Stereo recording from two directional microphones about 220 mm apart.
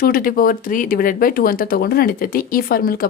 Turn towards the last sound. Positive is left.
turn(degrees=40)  # may be behind; listen again after turning